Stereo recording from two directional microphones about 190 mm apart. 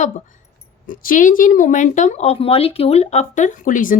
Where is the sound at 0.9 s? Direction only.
45° left (ahead or behind).